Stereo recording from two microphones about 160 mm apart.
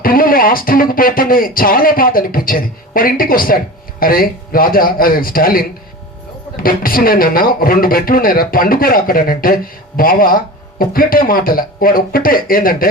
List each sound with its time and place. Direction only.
0.0 s speech: 65° left (ahead or behind)